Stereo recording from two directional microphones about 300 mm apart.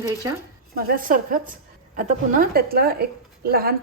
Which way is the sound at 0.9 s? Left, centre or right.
Right.